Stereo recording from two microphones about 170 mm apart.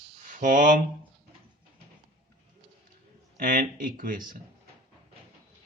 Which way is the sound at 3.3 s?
55° right (ahead or behind).